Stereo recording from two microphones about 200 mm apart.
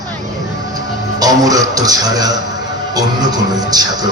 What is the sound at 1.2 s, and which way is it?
Music, 20° right (ahead or behind).